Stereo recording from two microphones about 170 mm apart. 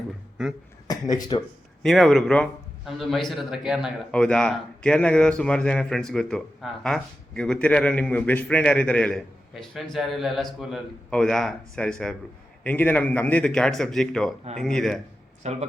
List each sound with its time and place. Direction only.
0.9 s speech: 25° left (ahead or behind)
1.8 s a man's voice: 5° left (ahead or behind)
15.4 s speech: 40° right (ahead or behind)